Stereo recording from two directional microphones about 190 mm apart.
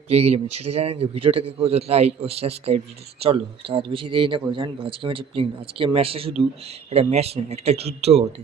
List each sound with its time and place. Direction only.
0.1 s a man's voice: 35° right (ahead or behind)